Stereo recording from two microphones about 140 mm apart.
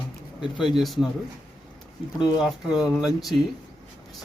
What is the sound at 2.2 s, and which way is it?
Speech, 5° right (ahead or behind).